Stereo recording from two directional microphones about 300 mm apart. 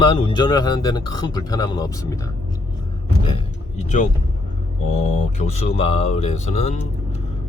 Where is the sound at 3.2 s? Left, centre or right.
Centre.